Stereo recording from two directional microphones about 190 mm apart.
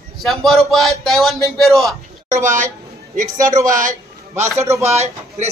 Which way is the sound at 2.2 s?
40° right (ahead or behind).